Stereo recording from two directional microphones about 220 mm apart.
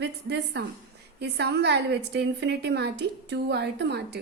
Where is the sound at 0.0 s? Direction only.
50° right (ahead or behind).